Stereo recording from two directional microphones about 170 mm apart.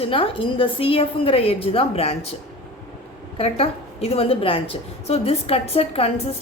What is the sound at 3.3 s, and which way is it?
A woman's voice, 35° left (ahead or behind).